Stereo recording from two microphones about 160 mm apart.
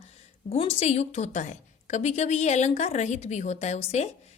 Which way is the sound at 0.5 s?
40° left (ahead or behind).